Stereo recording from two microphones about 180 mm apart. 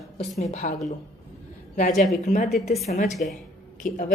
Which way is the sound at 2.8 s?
40° left (ahead or behind).